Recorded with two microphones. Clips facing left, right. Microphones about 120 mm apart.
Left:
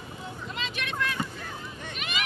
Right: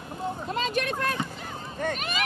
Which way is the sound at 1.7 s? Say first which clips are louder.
Right 8 dB; 45° right (ahead or behind).